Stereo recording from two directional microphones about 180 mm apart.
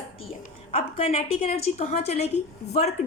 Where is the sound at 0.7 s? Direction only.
35° left (ahead or behind).